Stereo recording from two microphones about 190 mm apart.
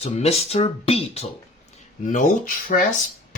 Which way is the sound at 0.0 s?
35° left (ahead or behind).